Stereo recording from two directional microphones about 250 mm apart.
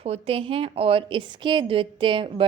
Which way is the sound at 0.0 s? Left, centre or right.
Right.